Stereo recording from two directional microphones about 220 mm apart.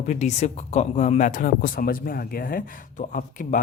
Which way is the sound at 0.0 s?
30° left (ahead or behind).